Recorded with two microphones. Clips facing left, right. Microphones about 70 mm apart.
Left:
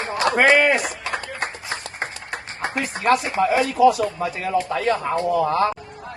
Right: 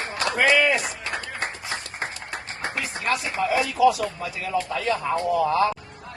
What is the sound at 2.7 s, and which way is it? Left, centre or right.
Speech, left.